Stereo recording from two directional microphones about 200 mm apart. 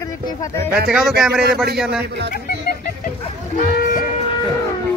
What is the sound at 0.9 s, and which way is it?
Speech, centre (ahead or behind).